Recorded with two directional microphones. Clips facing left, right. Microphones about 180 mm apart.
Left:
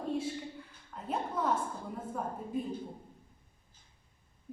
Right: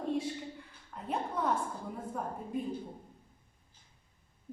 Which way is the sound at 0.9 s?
Centre (ahead or behind).